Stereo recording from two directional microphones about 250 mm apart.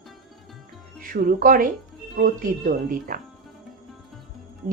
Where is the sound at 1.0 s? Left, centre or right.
Right.